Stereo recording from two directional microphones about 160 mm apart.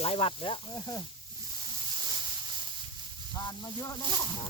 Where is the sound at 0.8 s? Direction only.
15° left (ahead or behind).